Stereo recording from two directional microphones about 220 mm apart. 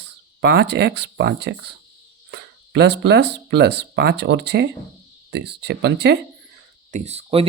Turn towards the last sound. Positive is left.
turn(degrees=-25)  # may be behind; listen again after turning